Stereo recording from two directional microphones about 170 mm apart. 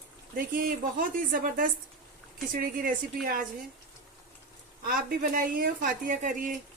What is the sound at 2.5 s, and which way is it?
Speech, 60° right (ahead or behind).